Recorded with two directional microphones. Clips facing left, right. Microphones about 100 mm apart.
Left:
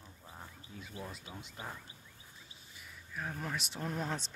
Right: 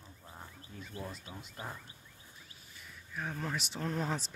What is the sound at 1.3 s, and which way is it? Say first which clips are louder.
Speech: even; centre (ahead or behind).